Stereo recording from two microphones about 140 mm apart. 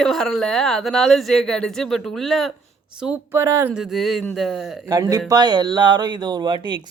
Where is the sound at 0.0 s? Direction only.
Centre (ahead or behind).